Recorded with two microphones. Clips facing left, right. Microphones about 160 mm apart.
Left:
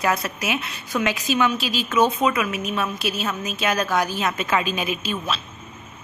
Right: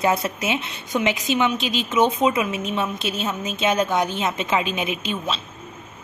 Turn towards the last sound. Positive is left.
turn(degrees=-20)  # may be behind; listen again after turning